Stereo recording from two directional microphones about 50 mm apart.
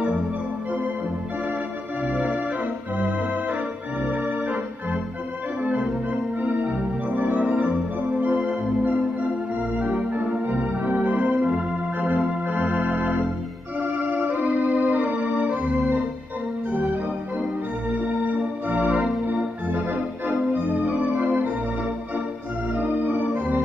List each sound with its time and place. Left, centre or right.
3.0 s organ: right
5.6 s organ: right
22.8 s organ: right